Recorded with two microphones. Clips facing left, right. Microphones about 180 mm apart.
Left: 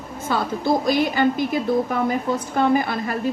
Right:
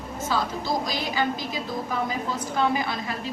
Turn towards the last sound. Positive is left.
turn(degrees=55)  # may be behind; listen again after turning